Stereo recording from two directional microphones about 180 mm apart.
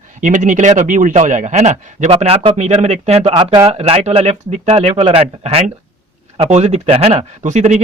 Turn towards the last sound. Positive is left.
turn(degrees=-40)  # may be behind; listen again after turning